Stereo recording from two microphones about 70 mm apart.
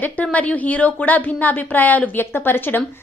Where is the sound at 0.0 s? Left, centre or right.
Left.